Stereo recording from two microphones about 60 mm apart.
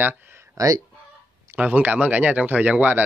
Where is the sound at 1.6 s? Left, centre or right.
Right.